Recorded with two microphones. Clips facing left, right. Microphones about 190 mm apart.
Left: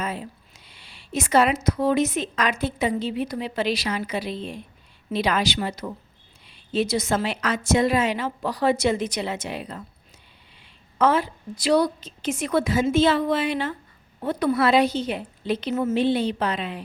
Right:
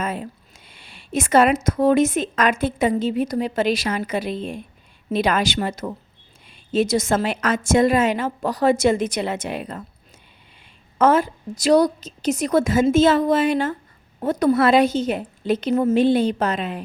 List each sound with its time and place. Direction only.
0.0 s a woman's voice: 50° right (ahead or behind)